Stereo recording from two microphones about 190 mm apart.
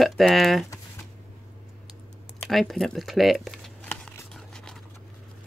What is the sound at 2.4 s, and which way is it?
Crumpling, centre (ahead or behind).